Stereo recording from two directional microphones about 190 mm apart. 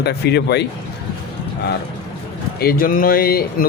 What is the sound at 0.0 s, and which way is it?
Speech, 60° left (ahead or behind).